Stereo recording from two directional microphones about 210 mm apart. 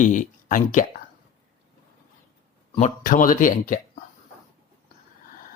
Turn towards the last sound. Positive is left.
turn(degrees=40)  # may be behind; listen again after turning